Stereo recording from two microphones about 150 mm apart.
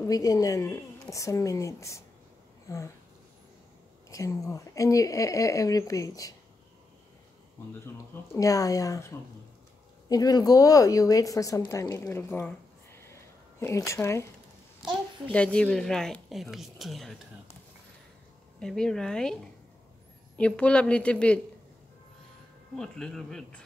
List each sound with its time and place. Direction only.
0.0 s speech: 20° left (ahead or behind)
4.1 s speech: 20° left (ahead or behind)
7.8 s a woman's voice: 15° left (ahead or behind)
15.3 s speech: 5° left (ahead or behind)
18.6 s speech: 5° left (ahead or behind)
20.3 s a woman's voice: 5° left (ahead or behind)
22.8 s speech: 5° left (ahead or behind)